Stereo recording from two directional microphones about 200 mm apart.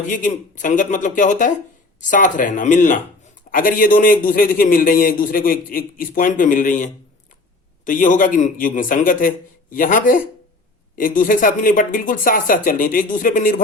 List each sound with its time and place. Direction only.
0.1 s a man's voice: 40° left (ahead or behind)